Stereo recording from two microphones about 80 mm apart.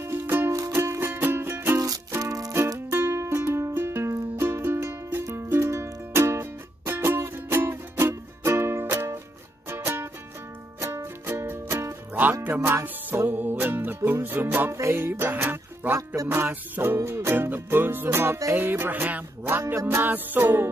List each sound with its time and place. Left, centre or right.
0.0 s music: right
1.8 s music: right
2.9 s music: right
12.1 s music: right
19.6 s music: right